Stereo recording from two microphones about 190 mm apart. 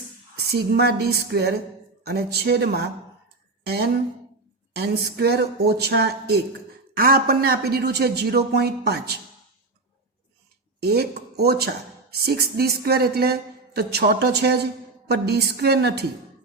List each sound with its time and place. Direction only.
0.5 s speech: 55° right (ahead or behind)
4.7 s speech: 60° right (ahead or behind)
10.8 s speech: 55° right (ahead or behind)